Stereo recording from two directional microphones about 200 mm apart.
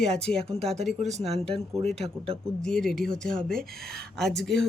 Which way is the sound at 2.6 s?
Centre (ahead or behind).